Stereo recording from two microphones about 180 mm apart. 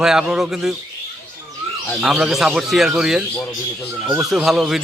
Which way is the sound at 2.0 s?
5° right (ahead or behind).